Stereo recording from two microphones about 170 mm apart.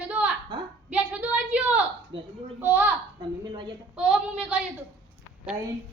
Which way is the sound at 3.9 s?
5° right (ahead or behind).